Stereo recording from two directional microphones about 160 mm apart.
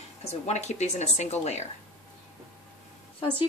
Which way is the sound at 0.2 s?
45° left (ahead or behind).